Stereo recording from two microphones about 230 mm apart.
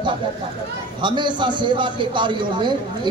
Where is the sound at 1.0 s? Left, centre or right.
Centre.